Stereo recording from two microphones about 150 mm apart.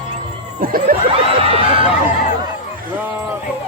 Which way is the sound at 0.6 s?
70° right (ahead or behind).